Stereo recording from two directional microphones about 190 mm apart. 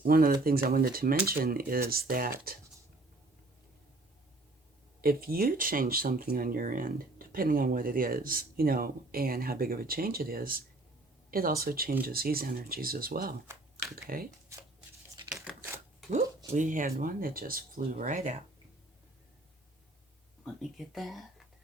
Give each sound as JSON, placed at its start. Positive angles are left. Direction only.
{"t": 0.0, "sound": "speech", "side_deg": -50}
{"t": 5.0, "sound": "speech", "side_deg": -50}
{"t": 14.5, "sound": "shuffling cards", "side_deg": -15}
{"t": 15.3, "sound": "crushing", "side_deg": 0}
{"t": 16.5, "sound": "speech", "side_deg": -40}
{"t": 20.4, "sound": "speech", "side_deg": 0}